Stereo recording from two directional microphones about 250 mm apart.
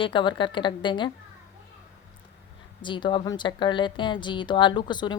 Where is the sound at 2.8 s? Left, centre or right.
Centre.